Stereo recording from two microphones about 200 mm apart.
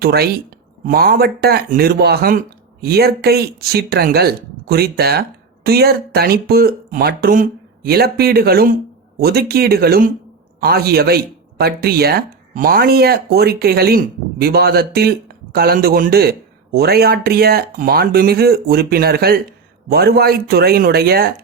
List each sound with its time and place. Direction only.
0.0 s speech: 50° right (ahead or behind)